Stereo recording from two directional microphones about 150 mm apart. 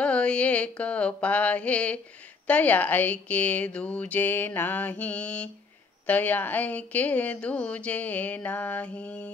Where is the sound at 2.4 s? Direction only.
10° left (ahead or behind).